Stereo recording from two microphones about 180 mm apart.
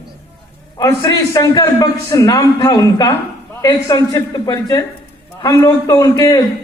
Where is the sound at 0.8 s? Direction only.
20° left (ahead or behind).